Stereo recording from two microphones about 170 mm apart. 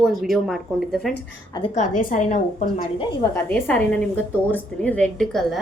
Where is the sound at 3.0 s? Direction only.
25° left (ahead or behind).